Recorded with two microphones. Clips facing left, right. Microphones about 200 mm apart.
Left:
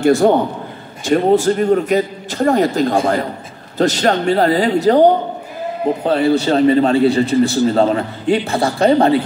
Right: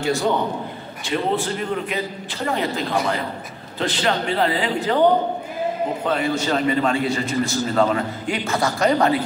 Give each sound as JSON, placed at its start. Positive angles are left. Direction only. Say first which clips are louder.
{"t": 0.0, "sound": "a man's voice", "louder": "left 9 dB", "side_deg": 50}
{"t": 6.0, "sound": "a man's voice", "louder": "left 8 dB", "side_deg": 30}